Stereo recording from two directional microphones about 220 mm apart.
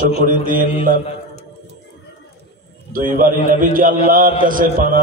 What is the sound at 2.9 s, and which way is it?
A man's voice, 40° right (ahead or behind).